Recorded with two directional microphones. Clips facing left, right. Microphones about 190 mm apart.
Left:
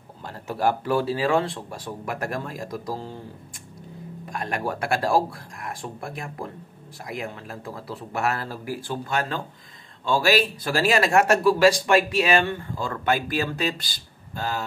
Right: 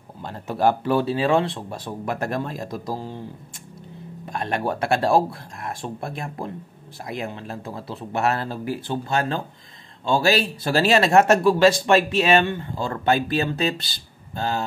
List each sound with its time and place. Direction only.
0.2 s speech: 20° right (ahead or behind)
4.3 s speech: 25° right (ahead or behind)